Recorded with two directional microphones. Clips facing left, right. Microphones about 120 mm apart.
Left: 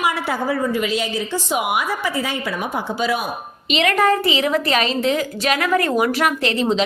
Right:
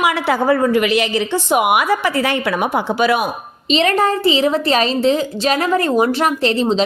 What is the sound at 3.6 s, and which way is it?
A woman's voice, 30° right (ahead or behind).